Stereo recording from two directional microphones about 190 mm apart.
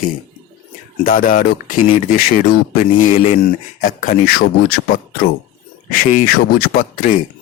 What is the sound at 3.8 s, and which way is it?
Speech, 45° left (ahead or behind).